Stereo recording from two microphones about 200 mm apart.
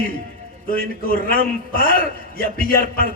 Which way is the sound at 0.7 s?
45° left (ahead or behind).